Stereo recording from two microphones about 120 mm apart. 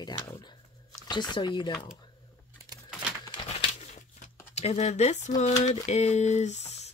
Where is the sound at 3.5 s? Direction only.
65° left (ahead or behind).